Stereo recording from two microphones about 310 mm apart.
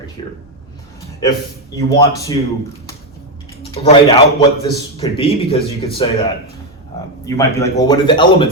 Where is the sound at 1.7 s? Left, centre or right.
Centre.